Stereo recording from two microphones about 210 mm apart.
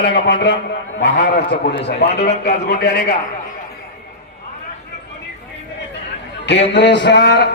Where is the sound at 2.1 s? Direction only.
30° left (ahead or behind).